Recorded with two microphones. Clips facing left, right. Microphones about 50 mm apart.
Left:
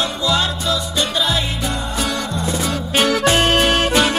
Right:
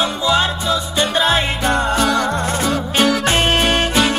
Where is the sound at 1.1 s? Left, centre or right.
Right.